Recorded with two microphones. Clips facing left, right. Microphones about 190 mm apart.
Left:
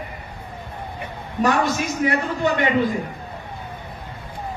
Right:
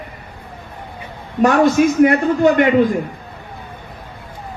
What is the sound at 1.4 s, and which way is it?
A man's voice, 60° right (ahead or behind).